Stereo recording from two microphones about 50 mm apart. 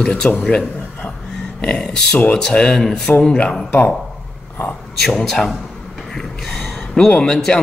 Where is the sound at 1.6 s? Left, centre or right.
Centre.